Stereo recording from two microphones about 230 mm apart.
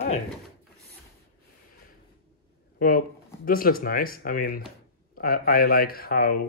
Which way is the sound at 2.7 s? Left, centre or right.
Left.